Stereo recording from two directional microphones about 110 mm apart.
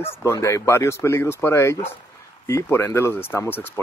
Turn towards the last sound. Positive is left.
turn(degrees=20)  # may be behind; listen again after turning